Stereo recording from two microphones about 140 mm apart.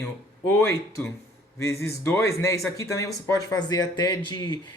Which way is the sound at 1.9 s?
20° left (ahead or behind).